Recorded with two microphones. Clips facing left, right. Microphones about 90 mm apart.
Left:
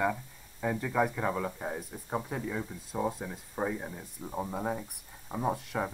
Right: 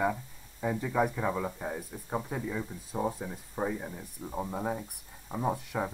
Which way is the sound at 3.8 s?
25° left (ahead or behind).